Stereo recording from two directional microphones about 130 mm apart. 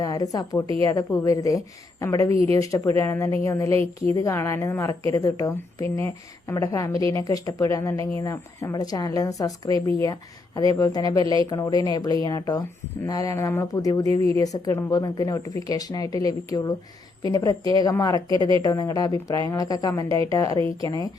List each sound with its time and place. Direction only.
0.0 s a woman's voice: 25° left (ahead or behind)